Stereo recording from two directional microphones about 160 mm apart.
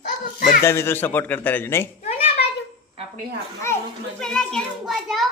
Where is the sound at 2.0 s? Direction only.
45° left (ahead or behind).